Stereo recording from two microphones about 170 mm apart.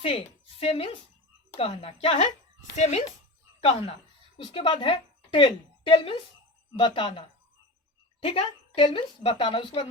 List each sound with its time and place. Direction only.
0.0 s a woman's voice: 30° left (ahead or behind)
3.6 s a woman's voice: 35° left (ahead or behind)